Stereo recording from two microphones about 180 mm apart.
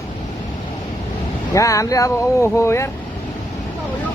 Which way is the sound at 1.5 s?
15° left (ahead or behind).